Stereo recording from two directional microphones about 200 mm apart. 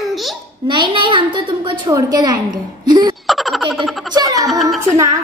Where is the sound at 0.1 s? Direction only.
Centre (ahead or behind).